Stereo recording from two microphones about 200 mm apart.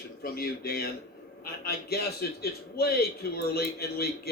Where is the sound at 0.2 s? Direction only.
50° left (ahead or behind).